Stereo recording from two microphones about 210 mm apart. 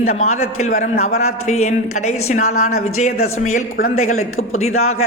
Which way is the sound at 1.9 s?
90° left.